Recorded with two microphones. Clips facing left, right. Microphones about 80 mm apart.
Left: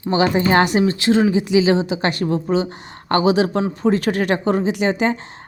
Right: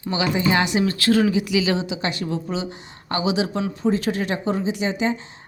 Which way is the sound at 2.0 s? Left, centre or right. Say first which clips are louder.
Left 6 dB; left.